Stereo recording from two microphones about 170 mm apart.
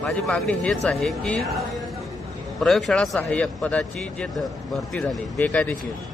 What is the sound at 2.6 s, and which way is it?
Speech, centre (ahead or behind).